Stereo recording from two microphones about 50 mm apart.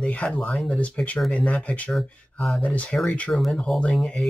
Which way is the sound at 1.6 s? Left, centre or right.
Left.